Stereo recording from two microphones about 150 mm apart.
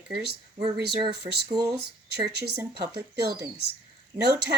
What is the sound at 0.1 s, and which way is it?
A woman's voice, 90° right.